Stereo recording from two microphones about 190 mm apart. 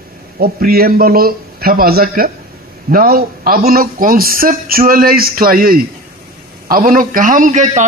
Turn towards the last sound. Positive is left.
turn(degrees=-40)  # may be behind; listen again after turning